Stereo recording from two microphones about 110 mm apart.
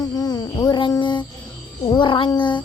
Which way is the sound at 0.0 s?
35° left (ahead or behind).